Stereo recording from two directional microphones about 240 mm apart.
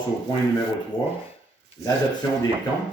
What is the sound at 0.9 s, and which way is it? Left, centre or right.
Speech, centre.